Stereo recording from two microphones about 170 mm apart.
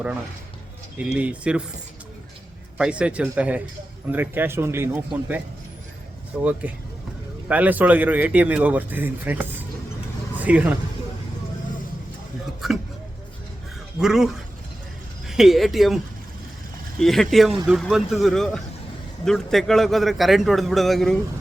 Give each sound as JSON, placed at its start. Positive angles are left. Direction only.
{"t": 0.9, "sound": "a man's voice", "side_deg": -5}
{"t": 2.7, "sound": "a man's voice", "side_deg": -5}
{"t": 6.4, "sound": "a man's voice", "side_deg": -10}
{"t": 12.6, "sound": "a sound", "side_deg": 0}
{"t": 14.0, "sound": "a man's voice", "side_deg": -5}
{"t": 15.3, "sound": "a man's voice", "side_deg": 0}
{"t": 17.0, "sound": "a man's voice", "side_deg": 0}